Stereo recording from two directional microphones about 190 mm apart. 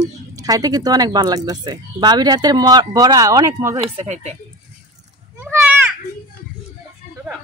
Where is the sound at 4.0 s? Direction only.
35° right (ahead or behind).